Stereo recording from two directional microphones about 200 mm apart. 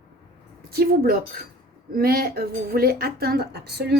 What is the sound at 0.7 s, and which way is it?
A woman's voice, 50° right (ahead or behind).